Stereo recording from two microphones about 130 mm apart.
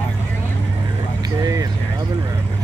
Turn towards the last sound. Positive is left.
turn(degrees=-30)  # may be behind; listen again after turning